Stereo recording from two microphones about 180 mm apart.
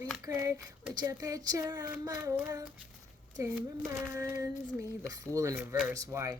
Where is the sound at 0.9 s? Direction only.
20° right (ahead or behind).